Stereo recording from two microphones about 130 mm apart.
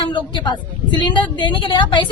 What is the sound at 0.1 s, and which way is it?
A woman's voice, 35° left (ahead or behind).